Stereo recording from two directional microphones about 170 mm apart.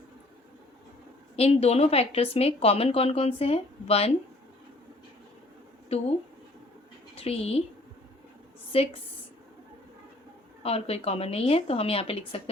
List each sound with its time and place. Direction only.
1.4 s a woman's voice: 35° left (ahead or behind)
7.2 s a woman's voice: 35° left (ahead or behind)
8.7 s speech: 35° left (ahead or behind)
10.6 s a woman's voice: 35° left (ahead or behind)